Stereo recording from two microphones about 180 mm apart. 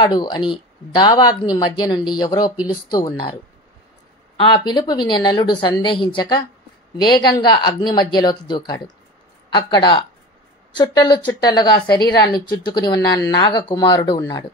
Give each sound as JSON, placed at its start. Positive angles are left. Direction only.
{"t": 0.0, "sound": "a woman's voice", "side_deg": 25}
{"t": 4.4, "sound": "a woman's voice", "side_deg": 25}